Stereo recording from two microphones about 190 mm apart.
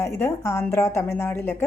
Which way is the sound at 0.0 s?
15° left (ahead or behind).